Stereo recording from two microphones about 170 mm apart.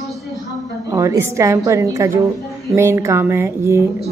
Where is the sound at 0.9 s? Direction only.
20° right (ahead or behind).